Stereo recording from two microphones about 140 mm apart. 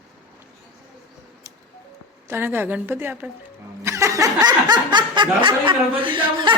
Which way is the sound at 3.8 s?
20° right (ahead or behind).